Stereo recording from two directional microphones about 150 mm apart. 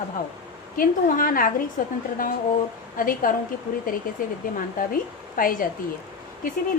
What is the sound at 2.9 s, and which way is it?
A woman's voice, 70° left (ahead or behind).